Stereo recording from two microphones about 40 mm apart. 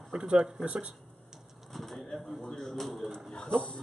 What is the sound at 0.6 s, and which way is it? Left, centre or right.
Speech, right.